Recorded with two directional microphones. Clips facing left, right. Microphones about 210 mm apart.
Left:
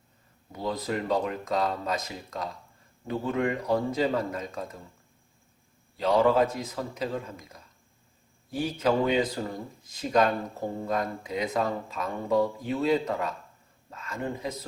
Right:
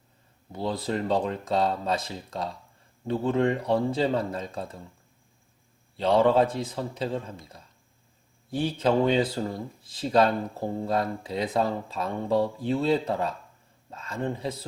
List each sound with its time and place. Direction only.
0.5 s speech: 30° right (ahead or behind)
6.0 s speech: 30° right (ahead or behind)